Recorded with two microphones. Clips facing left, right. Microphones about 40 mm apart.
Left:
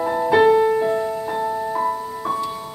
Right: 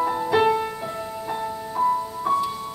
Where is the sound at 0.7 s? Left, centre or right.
Left.